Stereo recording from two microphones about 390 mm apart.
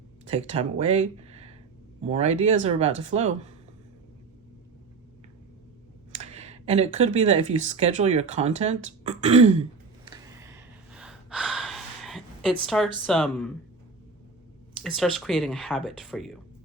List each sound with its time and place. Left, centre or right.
0.3 s speech: centre
6.2 s speech: centre
10.1 s gasp: centre
13.1 s speech: centre
14.8 s speech: centre